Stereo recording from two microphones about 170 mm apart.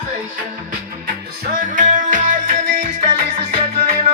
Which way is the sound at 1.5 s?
50° right (ahead or behind).